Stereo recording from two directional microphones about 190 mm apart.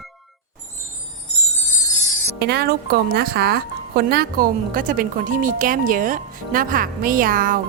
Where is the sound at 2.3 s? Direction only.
60° right (ahead or behind).